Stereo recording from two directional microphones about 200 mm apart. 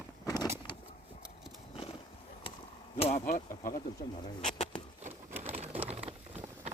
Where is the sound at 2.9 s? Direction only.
30° left (ahead or behind).